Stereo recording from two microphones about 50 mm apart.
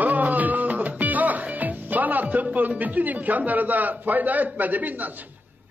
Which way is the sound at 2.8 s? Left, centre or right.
Right.